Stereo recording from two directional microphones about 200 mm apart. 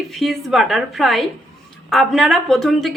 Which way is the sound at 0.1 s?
Centre (ahead or behind).